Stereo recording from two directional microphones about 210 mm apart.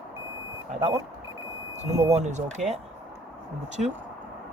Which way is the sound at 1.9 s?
30° right (ahead or behind).